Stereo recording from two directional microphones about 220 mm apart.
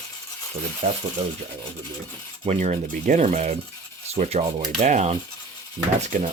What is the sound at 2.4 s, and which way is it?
Speech, 30° right (ahead or behind).